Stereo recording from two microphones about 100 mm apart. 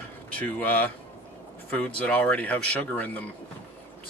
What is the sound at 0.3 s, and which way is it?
Speech, 15° left (ahead or behind).